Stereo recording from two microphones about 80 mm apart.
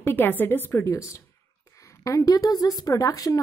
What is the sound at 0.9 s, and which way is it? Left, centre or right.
A woman's voice, left.